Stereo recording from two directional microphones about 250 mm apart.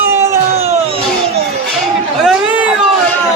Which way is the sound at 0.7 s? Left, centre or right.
Right.